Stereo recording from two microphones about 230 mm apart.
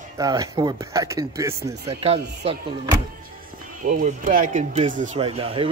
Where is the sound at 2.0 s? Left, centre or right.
Right.